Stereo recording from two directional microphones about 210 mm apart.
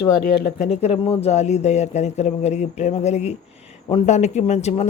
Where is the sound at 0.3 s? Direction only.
50° left (ahead or behind).